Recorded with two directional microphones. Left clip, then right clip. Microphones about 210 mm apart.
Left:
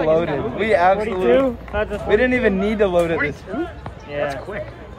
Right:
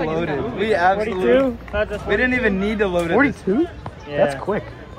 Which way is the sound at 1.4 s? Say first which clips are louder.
Even; 45° right (ahead or behind).